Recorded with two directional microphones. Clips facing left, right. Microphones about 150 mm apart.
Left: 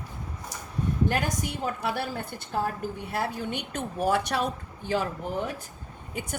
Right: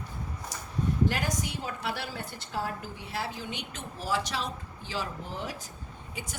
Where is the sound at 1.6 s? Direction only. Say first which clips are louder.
Left 5 dB; 50° left (ahead or behind).